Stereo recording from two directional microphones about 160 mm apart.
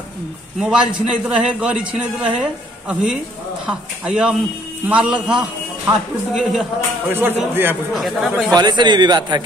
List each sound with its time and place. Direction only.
0.6 s a man's voice: 5° right (ahead or behind)
7.1 s a man's voice: 15° right (ahead or behind)
7.9 s speech: centre (ahead or behind)
8.5 s a man's voice: 25° right (ahead or behind)